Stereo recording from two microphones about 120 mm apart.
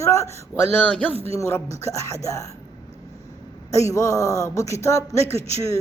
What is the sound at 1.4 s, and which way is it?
Speech, 25° left (ahead or behind).